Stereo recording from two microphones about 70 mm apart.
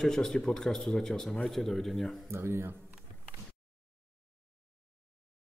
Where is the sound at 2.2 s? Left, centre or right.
Right.